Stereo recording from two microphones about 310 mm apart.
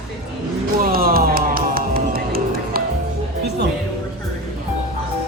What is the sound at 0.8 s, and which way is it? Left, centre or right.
Music, right.